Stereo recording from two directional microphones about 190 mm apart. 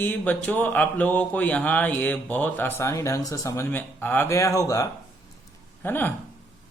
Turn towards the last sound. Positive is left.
turn(degrees=10)  # may be behind; listen again after turning